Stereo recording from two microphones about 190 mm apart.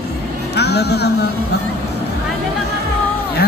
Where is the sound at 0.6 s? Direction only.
60° left (ahead or behind).